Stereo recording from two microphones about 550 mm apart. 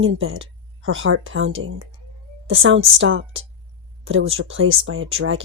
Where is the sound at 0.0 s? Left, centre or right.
Right.